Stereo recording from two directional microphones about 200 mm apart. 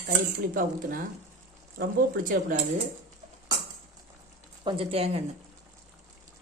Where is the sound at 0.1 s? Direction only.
45° right (ahead or behind).